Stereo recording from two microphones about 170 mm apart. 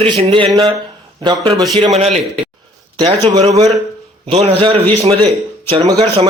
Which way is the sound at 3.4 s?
40° right (ahead or behind).